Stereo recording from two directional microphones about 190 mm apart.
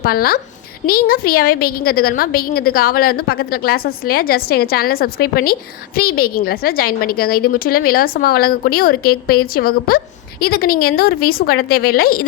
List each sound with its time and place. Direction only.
0.0 s a woman's voice: 50° left (ahead or behind)